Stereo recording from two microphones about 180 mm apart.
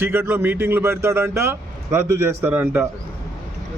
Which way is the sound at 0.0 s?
10° right (ahead or behind).